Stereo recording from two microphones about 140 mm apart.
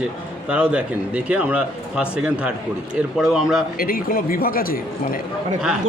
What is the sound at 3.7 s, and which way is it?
Speech, 90° left.